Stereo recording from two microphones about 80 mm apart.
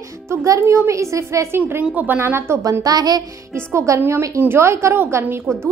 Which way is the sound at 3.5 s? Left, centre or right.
Right.